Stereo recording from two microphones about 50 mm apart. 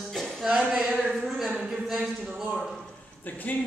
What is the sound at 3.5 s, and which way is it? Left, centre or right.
Speech, left.